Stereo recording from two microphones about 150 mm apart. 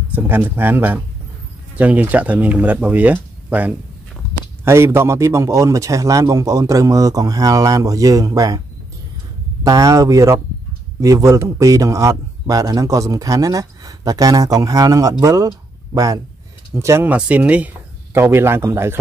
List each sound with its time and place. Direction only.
0.1 s a man's voice: 15° right (ahead or behind)